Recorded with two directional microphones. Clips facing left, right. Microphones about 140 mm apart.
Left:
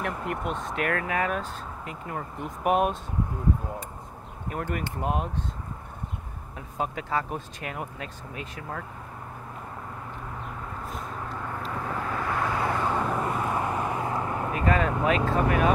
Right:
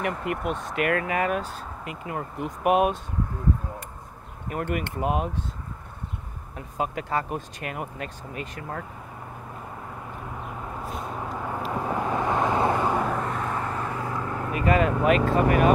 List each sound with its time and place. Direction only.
0.0 s speech: 5° right (ahead or behind)
4.5 s speech: 5° right (ahead or behind)
6.8 s speech: centre (ahead or behind)
11.2 s vehicle: 15° right (ahead or behind)
13.1 s vehicle: 5° left (ahead or behind); by 14.4 s 20° left (ahead or behind)
14.5 s speech: 5° right (ahead or behind)